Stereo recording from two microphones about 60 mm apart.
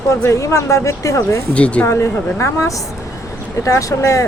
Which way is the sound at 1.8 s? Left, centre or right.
Left.